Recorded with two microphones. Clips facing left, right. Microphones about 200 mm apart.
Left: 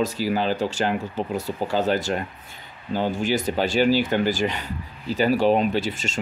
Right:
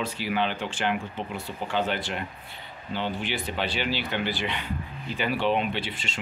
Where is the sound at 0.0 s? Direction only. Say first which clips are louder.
Left 5 dB; 40° left (ahead or behind).